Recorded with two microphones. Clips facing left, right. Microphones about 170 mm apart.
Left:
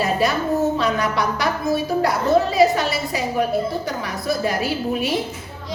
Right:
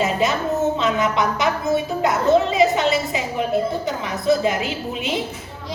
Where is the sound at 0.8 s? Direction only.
20° right (ahead or behind).